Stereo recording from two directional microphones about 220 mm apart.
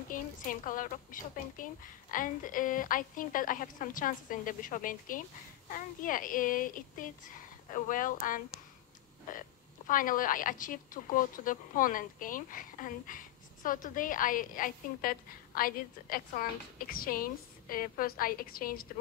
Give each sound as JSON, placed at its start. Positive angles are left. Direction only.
{"t": 0.1, "sound": "a woman's voice", "side_deg": 40}